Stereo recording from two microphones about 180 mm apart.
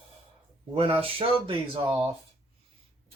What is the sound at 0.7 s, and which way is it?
Speech, 30° right (ahead or behind).